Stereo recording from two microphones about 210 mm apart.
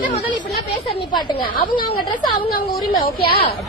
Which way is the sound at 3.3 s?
25° left (ahead or behind).